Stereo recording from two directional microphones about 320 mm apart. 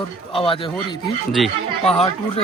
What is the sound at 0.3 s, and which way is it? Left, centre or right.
Speech, centre.